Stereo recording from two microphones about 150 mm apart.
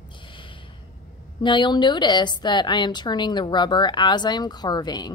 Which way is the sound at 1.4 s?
30° left (ahead or behind).